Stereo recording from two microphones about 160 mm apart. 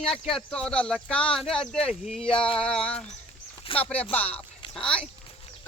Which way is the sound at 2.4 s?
35° left (ahead or behind).